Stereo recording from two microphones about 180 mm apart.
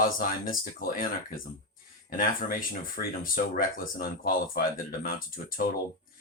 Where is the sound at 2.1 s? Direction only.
50° left (ahead or behind).